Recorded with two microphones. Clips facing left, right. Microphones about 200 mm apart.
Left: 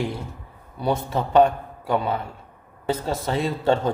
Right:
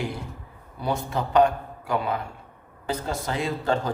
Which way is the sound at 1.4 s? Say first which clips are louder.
Left 3 dB; 25° left (ahead or behind).